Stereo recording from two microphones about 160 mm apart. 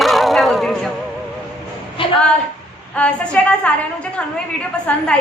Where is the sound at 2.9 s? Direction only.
5° left (ahead or behind).